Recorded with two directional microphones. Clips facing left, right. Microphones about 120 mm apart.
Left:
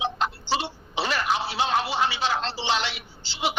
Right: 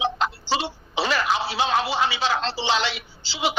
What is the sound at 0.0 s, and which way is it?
Music, 90° right.